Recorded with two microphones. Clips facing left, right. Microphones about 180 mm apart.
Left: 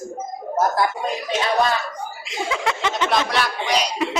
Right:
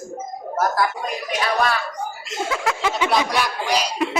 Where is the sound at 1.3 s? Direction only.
25° left (ahead or behind).